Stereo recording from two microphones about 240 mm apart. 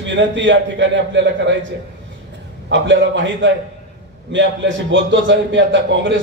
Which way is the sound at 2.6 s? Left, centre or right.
Right.